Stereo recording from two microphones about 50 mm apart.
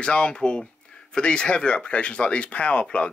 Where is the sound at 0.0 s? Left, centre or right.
Centre.